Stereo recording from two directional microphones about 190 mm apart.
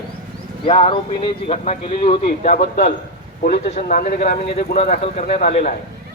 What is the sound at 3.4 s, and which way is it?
Speech, 50° left (ahead or behind).